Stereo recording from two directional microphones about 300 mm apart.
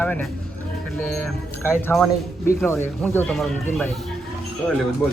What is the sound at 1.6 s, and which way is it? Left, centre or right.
Speech, centre.